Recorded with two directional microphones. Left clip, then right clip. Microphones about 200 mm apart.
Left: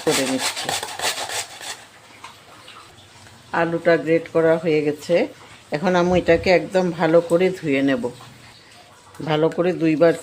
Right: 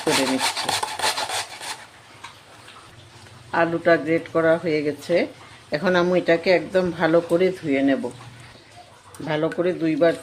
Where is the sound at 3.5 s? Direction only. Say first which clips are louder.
Even; 10° left (ahead or behind).